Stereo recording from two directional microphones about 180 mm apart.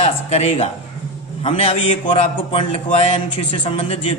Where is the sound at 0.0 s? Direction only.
40° left (ahead or behind).